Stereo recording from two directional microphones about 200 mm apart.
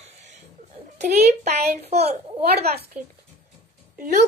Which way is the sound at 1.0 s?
35° right (ahead or behind).